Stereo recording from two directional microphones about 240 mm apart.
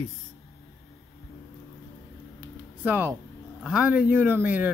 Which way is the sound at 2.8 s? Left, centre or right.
Centre.